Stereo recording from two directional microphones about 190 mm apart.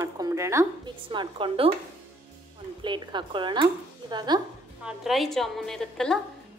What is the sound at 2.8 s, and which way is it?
A woman's voice, 25° right (ahead or behind).